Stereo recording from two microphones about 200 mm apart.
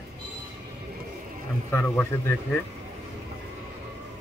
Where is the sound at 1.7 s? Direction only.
10° left (ahead or behind).